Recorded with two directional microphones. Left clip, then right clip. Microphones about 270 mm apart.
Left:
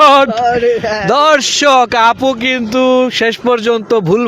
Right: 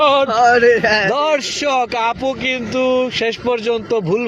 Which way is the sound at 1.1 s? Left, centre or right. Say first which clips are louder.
Left 7 dB; left.